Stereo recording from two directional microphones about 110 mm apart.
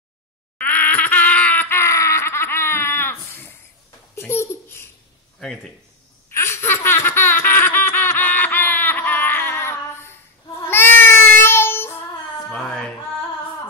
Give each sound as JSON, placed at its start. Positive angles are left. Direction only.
{"t": 0.6, "sound": "a sound", "side_deg": 15}
{"t": 4.1, "sound": "babbling", "side_deg": 20}
{"t": 6.3, "sound": "laughter", "side_deg": 20}
{"t": 12.4, "sound": "music", "side_deg": 5}